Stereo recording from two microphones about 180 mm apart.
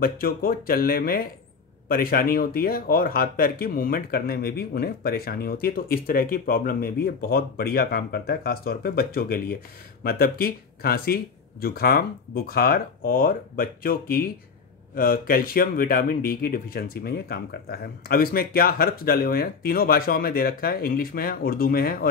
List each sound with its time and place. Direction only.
0.0 s speech: 55° left (ahead or behind)